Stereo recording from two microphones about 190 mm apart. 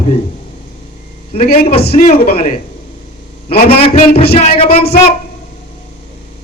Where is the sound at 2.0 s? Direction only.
45° left (ahead or behind).